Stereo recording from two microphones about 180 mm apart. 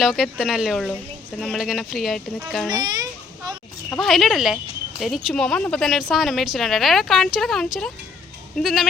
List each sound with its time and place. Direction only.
0.0 s speech: centre (ahead or behind)
2.8 s children playing: 20° right (ahead or behind)
3.8 s speech: centre (ahead or behind)